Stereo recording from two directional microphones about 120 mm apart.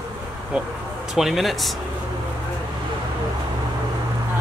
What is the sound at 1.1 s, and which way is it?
Speech, centre (ahead or behind).